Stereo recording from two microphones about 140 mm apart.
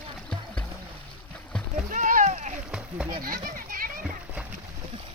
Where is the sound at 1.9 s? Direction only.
70° right (ahead or behind).